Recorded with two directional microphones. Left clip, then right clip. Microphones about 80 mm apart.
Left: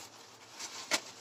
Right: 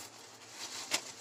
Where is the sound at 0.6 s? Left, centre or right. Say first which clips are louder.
Left 2 dB; left.